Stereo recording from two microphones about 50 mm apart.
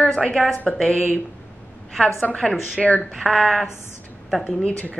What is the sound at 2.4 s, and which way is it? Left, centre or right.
A woman's voice, centre.